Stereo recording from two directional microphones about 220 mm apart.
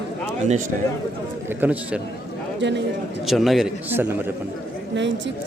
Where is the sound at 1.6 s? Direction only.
5° right (ahead or behind).